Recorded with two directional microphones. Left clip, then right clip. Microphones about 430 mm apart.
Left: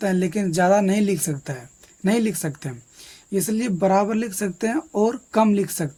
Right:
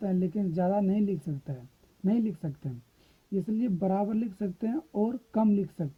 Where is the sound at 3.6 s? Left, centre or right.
Right.